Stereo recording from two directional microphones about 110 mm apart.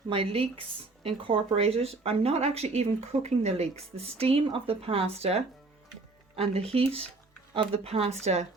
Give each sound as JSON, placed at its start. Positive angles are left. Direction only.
{"t": 0.1, "sound": "speech", "side_deg": -60}
{"t": 1.5, "sound": "speech", "side_deg": -65}